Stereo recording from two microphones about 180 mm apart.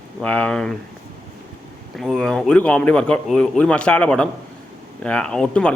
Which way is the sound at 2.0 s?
5° left (ahead or behind).